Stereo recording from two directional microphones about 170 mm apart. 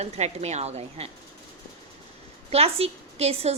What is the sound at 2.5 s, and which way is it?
A woman's voice, 35° right (ahead or behind).